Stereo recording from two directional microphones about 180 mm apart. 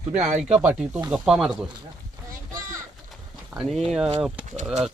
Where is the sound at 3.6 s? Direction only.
Centre (ahead or behind).